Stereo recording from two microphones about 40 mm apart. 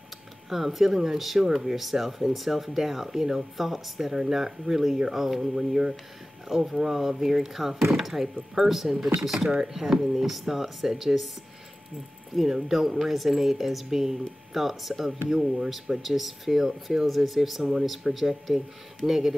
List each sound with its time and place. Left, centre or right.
0.5 s speech: centre
12.4 s speech: centre
15.0 s speech: centre